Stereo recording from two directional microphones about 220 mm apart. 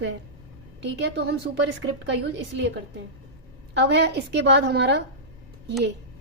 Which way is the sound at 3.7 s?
50° right (ahead or behind).